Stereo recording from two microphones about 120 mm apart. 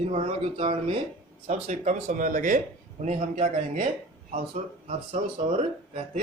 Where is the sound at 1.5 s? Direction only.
85° right.